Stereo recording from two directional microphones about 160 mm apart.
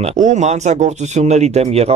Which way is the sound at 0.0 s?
45° right (ahead or behind).